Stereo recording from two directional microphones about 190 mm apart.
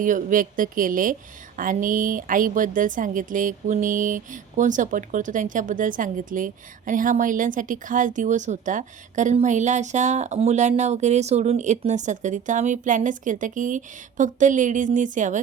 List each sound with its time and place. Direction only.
0.0 s a woman's voice: 45° right (ahead or behind)